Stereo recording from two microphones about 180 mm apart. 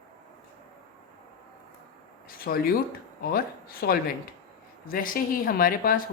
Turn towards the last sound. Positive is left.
turn(degrees=50)  # may be behind; listen again after turning